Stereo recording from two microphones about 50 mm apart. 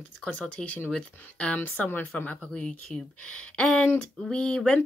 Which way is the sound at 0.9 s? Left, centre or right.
Centre.